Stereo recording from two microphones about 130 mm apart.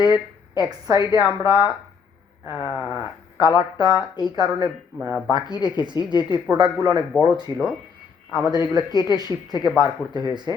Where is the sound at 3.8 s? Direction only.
30° right (ahead or behind).